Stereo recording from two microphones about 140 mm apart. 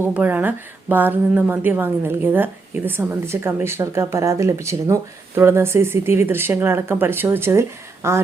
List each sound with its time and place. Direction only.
0.0 s a woman's voice: 10° right (ahead or behind)